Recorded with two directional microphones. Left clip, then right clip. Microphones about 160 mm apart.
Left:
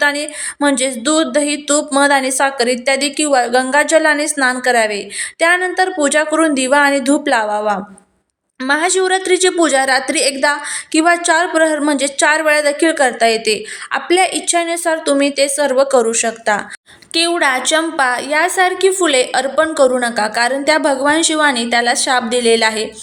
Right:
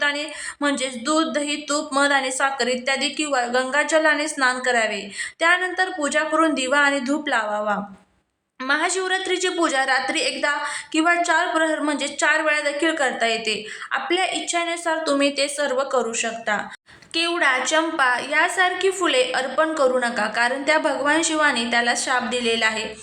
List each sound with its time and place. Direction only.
0.0 s a woman's voice: 30° left (ahead or behind)